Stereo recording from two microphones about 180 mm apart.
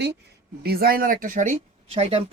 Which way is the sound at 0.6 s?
55° right (ahead or behind).